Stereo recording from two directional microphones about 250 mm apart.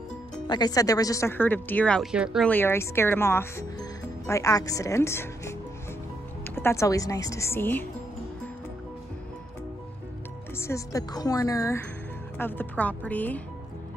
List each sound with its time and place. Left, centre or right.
0.5 s speech: centre
10.6 s speech: centre